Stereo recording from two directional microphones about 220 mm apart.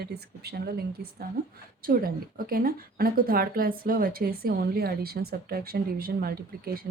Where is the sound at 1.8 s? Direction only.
40° right (ahead or behind).